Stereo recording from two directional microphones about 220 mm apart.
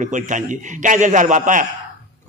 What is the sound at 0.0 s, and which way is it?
A man's voice, 35° right (ahead or behind).